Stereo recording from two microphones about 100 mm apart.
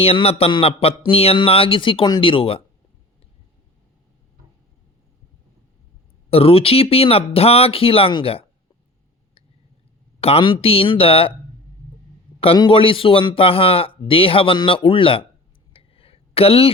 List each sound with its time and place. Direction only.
0.0 s speech: 75° left (ahead or behind)
1.4 s speech: 65° left (ahead or behind)
6.3 s speech: 75° left (ahead or behind)
10.2 s speech: 75° left (ahead or behind)
10.4 s speech: 60° left (ahead or behind)
12.7 s speech: 65° left (ahead or behind)
15.7 s a sound: 70° left (ahead or behind)